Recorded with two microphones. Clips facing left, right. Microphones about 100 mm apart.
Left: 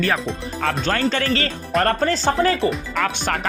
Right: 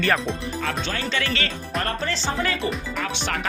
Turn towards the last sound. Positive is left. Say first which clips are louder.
# left 5 dB
turn(degrees=45)  # may be behind; listen again after turning